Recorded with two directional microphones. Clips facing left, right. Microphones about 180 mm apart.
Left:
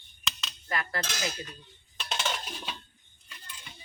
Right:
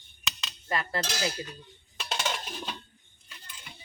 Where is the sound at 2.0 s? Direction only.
10° right (ahead or behind).